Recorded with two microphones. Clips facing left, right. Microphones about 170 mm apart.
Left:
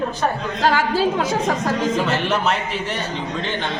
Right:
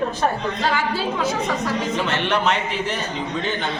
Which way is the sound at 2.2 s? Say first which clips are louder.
Even; 5° left (ahead or behind).